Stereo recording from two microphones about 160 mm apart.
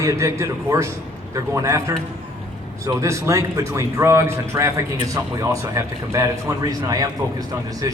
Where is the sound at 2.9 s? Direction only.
20° right (ahead or behind).